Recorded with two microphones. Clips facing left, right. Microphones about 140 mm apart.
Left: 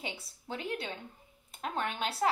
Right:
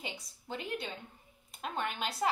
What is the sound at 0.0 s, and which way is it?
A woman's voice, centre (ahead or behind).